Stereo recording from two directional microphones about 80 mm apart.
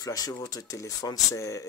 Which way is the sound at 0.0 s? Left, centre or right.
Left.